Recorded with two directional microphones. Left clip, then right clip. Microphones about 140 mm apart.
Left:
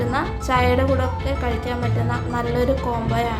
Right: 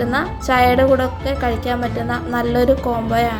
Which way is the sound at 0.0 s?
35° right (ahead or behind).